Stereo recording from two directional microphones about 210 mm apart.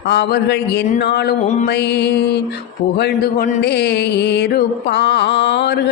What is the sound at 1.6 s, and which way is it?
Music, 55° left (ahead or behind).